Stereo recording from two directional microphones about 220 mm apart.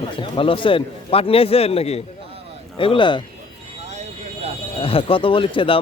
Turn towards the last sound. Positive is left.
turn(degrees=25)  # may be behind; listen again after turning